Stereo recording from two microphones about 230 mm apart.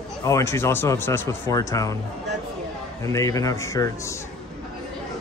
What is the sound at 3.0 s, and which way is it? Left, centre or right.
Speech, centre.